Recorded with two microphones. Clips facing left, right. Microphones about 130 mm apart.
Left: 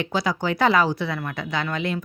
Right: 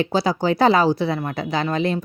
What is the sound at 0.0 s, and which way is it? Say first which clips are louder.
Speech: right 4 dB; 30° right (ahead or behind).